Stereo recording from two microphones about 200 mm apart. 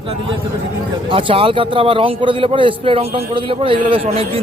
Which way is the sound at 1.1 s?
25° right (ahead or behind).